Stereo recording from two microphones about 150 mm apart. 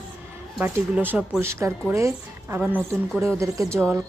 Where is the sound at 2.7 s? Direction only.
5° left (ahead or behind).